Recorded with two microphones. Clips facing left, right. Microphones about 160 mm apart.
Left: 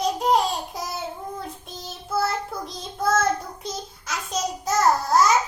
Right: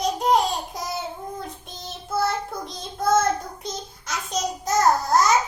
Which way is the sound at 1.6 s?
Centre (ahead or behind).